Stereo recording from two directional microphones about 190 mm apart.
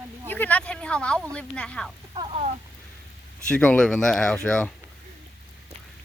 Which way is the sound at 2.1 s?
25° right (ahead or behind).